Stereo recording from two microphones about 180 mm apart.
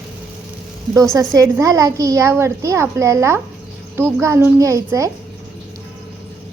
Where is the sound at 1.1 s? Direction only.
20° right (ahead or behind).